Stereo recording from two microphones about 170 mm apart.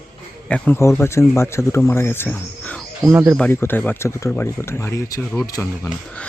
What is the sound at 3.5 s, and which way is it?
Speech, 15° left (ahead or behind).